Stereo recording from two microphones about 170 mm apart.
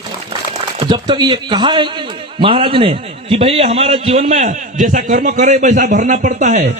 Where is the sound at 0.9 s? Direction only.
25° right (ahead or behind).